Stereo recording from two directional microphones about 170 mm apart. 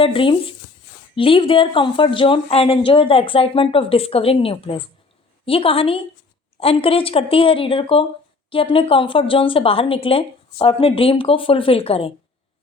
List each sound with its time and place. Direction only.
0.0 s a woman's voice: 30° left (ahead or behind)